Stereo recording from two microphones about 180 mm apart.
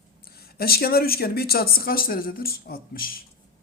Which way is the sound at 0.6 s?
55° left (ahead or behind).